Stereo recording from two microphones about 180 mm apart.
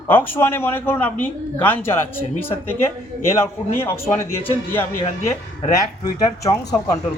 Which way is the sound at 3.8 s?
15° left (ahead or behind).